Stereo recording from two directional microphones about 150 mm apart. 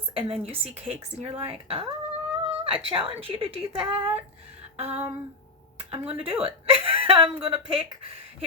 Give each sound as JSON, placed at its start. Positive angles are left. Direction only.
{"t": 0.1, "sound": "a woman's voice", "side_deg": -40}
{"t": 4.8, "sound": "a sound", "side_deg": -45}
{"t": 5.9, "sound": "a woman's voice", "side_deg": -40}